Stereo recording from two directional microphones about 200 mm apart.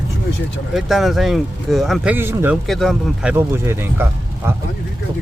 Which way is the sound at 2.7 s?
Centre (ahead or behind).